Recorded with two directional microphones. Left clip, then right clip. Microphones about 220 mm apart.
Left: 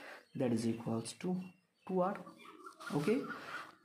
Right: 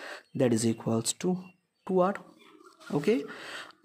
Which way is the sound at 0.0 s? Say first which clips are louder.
Right 10 dB; 45° right (ahead or behind).